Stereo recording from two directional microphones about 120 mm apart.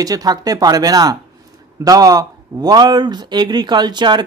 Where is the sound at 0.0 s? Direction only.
30° right (ahead or behind).